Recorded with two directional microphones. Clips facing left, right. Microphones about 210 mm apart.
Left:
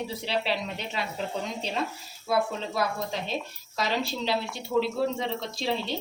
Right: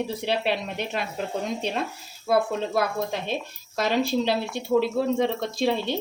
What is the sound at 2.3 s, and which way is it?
Speech, 55° right (ahead or behind).